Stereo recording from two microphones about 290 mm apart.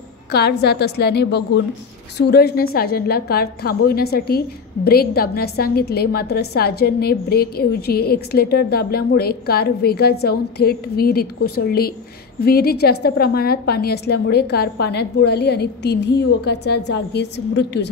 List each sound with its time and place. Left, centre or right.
0.3 s a woman's voice: left